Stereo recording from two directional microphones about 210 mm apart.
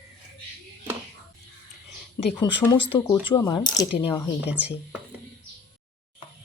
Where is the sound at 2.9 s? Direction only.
20° left (ahead or behind).